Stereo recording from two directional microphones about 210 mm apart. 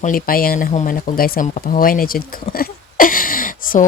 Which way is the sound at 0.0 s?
40° left (ahead or behind).